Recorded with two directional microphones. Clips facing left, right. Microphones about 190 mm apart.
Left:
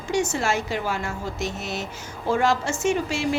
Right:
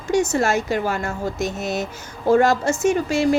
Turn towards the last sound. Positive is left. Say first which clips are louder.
# right 5 dB
turn(degrees=-45)  # may be behind; listen again after turning